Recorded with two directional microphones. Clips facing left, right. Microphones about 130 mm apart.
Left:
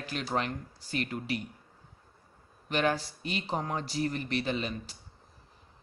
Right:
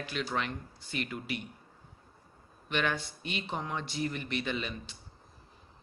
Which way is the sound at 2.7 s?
35° left (ahead or behind).